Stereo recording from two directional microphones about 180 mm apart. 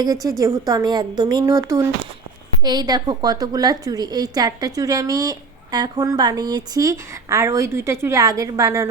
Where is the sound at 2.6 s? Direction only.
20° right (ahead or behind).